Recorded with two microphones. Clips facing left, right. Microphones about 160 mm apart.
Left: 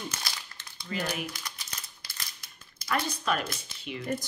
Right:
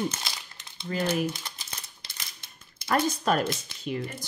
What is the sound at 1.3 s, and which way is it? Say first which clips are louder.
Speech: right 7 dB; 25° right (ahead or behind).